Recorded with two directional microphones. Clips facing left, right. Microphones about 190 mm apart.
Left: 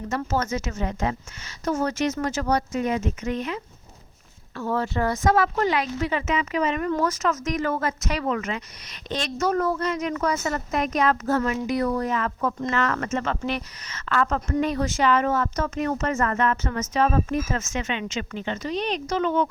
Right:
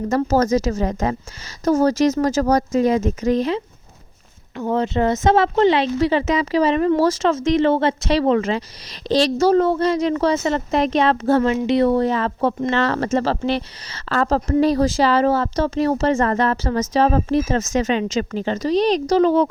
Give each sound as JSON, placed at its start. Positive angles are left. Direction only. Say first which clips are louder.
{"t": 0.1, "sound": "a woman's voice", "louder": "right 9 dB", "side_deg": -40}
{"t": 4.5, "sound": "a woman's voice", "louder": "right 6 dB", "side_deg": -20}